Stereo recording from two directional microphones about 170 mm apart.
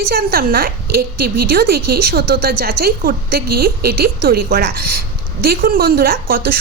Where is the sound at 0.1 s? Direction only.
60° right (ahead or behind).